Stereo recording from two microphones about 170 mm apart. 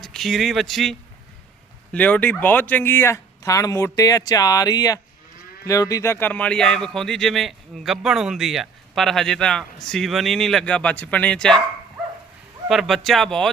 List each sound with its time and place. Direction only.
0.0 s speech: centre (ahead or behind)
12.6 s speech: centre (ahead or behind)